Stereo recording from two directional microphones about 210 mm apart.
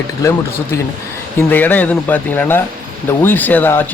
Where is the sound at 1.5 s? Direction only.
10° left (ahead or behind).